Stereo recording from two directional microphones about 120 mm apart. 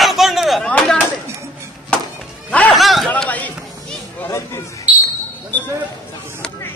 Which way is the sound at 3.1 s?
10° left (ahead or behind).